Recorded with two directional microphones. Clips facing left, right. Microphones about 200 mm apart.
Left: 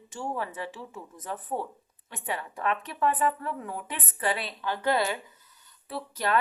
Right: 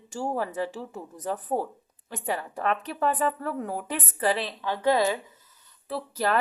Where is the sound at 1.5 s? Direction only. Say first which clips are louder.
Right 4 dB; 30° right (ahead or behind).